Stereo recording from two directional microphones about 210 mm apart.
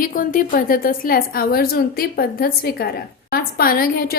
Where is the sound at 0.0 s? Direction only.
40° left (ahead or behind).